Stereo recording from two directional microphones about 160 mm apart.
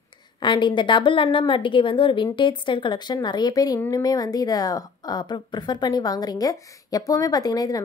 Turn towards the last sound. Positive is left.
turn(degrees=25)  # may be behind; listen again after turning